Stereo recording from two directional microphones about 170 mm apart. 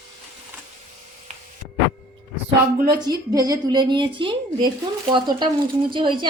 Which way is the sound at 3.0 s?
20° right (ahead or behind).